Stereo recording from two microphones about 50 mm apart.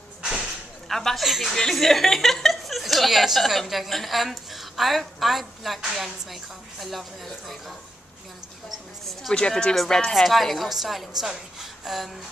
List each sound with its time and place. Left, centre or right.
0.4 s a sound: centre
1.6 s a woman's voice: centre
9.3 s a woman's voice: centre